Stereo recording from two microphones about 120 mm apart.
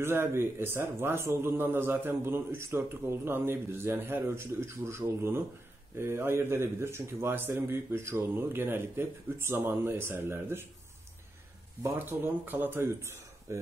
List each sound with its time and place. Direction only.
0.0 s a man's voice: 20° right (ahead or behind)
11.8 s speech: 20° right (ahead or behind)